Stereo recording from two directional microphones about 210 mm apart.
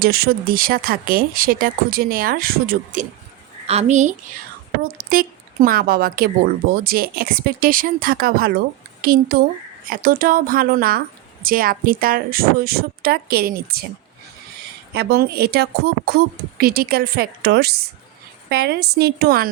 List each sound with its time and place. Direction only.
0.0 s a woman's voice: 45° right (ahead or behind)
14.9 s speech: 50° right (ahead or behind)